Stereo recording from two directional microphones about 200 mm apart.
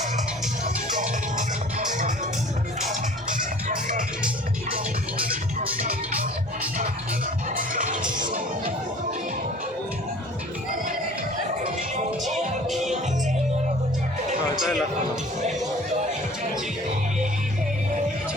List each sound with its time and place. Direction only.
0.6 s music: 40° right (ahead or behind)
5.1 s music: 45° right (ahead or behind)
7.5 s music: 40° right (ahead or behind)
12.2 s music: centre (ahead or behind)
14.5 s a sound: centre (ahead or behind)